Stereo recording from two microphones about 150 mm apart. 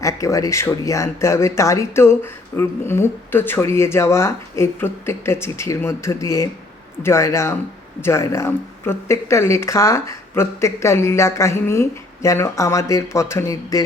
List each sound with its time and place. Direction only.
0.0 s speech: 20° left (ahead or behind)